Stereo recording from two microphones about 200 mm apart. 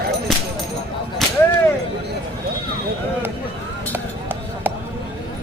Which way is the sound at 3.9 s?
10° right (ahead or behind).